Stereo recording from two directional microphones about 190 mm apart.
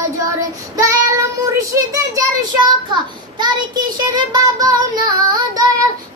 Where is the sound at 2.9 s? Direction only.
25° right (ahead or behind).